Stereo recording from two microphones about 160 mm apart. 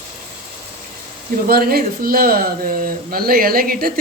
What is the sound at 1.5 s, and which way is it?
Speech, 65° right (ahead or behind).